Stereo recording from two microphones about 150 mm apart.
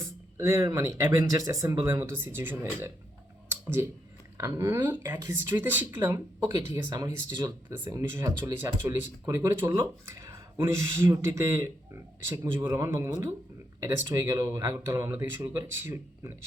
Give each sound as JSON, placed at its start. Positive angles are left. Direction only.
{"t": 0.0, "sound": "speech", "side_deg": -20}
{"t": 3.5, "sound": "a sound", "side_deg": -15}
{"t": 4.4, "sound": "speech", "side_deg": -20}
{"t": 6.9, "sound": "speech", "side_deg": -25}